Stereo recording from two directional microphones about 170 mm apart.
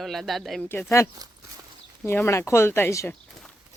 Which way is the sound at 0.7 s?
15° left (ahead or behind).